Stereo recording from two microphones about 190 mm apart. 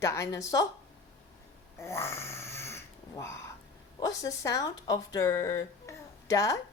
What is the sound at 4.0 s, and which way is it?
Speech, 20° left (ahead or behind).